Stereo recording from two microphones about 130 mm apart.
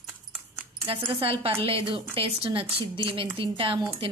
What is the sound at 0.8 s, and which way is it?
A woman's voice, 45° right (ahead or behind).